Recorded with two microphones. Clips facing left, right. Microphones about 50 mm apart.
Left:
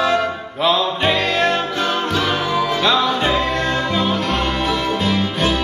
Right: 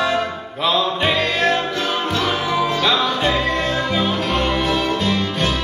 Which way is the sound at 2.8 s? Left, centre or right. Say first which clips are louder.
Left 1 dB; centre.